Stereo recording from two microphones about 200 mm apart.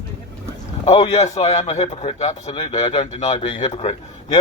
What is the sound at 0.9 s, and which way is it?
A man's voice, 30° left (ahead or behind).